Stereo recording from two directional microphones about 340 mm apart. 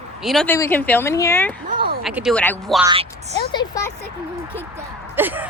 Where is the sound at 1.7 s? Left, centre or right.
Right.